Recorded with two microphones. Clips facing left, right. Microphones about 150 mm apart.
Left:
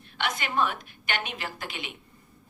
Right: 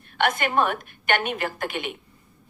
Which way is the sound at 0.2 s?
55° right (ahead or behind).